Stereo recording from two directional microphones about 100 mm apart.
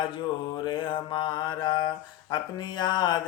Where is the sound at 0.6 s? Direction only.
55° left (ahead or behind).